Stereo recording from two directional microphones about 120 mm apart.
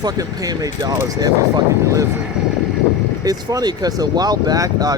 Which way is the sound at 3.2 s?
30° right (ahead or behind).